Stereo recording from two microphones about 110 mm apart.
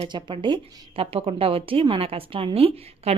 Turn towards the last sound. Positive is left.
turn(degrees=-65)  # may be behind; listen again after turning